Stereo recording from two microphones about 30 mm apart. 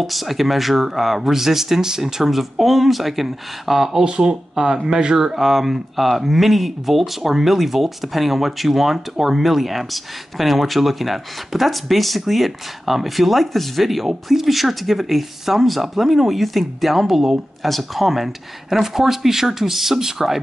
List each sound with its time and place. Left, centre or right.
0.0 s speech: centre
2.3 s speech: centre
4.0 s speech: right
4.8 s speech: centre